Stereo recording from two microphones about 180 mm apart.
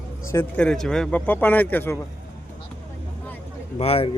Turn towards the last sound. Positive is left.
turn(degrees=35)  # may be behind; listen again after turning